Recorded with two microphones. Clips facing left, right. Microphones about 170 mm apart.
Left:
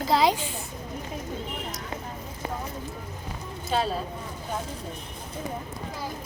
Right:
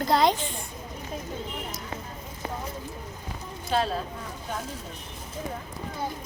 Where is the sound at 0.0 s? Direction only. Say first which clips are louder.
Even; 5° left (ahead or behind).